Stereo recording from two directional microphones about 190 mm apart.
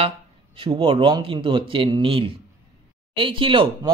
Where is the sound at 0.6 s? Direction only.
25° right (ahead or behind).